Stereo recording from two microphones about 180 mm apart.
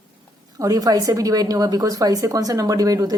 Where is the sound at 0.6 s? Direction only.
20° right (ahead or behind).